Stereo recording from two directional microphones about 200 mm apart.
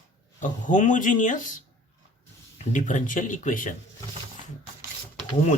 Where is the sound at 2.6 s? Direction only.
40° left (ahead or behind).